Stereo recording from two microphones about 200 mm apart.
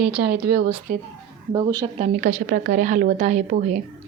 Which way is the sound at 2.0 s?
35° right (ahead or behind).